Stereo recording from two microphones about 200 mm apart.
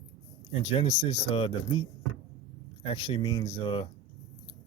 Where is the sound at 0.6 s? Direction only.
30° left (ahead or behind).